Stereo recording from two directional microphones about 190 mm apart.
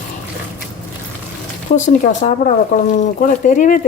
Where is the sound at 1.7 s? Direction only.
40° left (ahead or behind).